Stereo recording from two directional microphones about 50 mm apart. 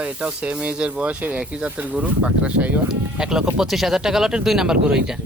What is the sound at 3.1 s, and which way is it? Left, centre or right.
Speech, centre.